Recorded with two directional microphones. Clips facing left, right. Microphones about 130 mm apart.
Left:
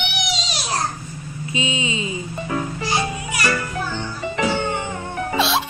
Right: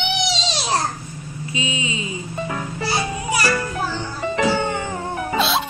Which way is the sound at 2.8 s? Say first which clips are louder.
Even; 35° right (ahead or behind).